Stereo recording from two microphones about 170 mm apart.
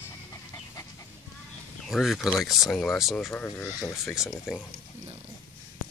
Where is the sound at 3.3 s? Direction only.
10° left (ahead or behind).